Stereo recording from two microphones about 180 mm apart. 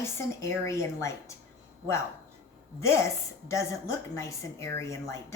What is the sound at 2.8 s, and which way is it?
A woman's voice, 15° left (ahead or behind).